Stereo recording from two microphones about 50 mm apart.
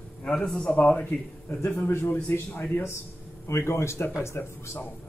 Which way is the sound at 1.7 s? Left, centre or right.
Left.